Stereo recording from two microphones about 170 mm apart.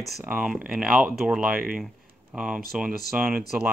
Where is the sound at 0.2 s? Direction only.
10° right (ahead or behind).